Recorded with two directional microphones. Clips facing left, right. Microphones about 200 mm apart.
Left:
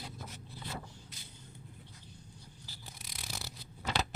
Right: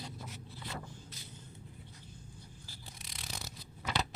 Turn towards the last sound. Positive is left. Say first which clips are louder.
# left 1 dB
turn(degrees=0)  # may be behind; listen again after turning